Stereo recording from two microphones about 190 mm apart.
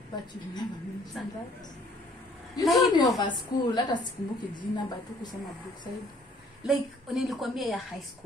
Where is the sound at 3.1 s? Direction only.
25° left (ahead or behind).